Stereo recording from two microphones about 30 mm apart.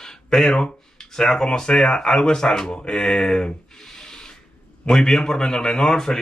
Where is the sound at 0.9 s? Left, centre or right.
Centre.